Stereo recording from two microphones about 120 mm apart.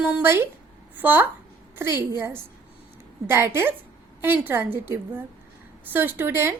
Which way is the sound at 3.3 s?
20° right (ahead or behind).